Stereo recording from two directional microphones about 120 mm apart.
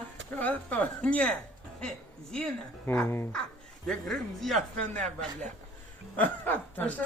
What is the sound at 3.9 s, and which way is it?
Speech, 5° left (ahead or behind).